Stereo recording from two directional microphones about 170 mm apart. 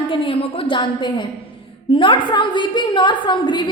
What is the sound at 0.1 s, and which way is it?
A woman's voice, 30° left (ahead or behind).